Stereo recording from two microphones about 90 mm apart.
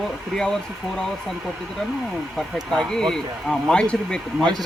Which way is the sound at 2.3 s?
5° left (ahead or behind).